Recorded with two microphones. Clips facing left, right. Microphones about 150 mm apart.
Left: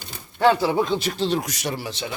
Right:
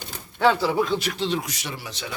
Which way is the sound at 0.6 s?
20° left (ahead or behind).